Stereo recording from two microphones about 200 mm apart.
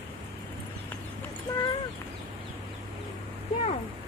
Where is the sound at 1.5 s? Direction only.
15° left (ahead or behind).